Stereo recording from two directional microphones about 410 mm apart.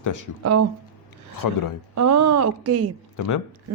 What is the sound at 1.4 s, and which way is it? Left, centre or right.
Speech, left.